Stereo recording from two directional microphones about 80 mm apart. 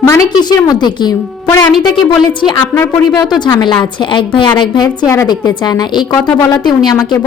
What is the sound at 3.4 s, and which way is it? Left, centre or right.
Speech, left.